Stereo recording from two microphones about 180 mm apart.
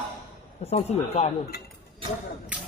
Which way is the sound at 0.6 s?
35° left (ahead or behind).